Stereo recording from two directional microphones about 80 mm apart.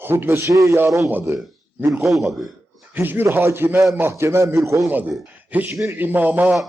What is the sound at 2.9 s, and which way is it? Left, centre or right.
A man's voice, right.